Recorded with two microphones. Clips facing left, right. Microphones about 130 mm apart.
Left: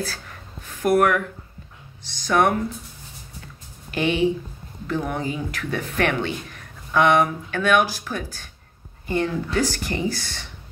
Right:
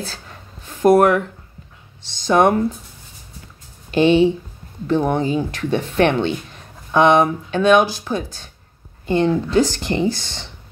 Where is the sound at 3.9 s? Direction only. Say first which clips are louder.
Right 7 dB; 25° right (ahead or behind).